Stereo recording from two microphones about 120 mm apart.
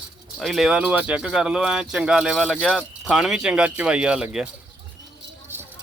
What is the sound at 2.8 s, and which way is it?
Speech, 5° right (ahead or behind).